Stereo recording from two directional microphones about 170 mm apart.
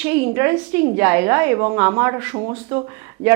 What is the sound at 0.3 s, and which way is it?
A woman's voice, 15° right (ahead or behind).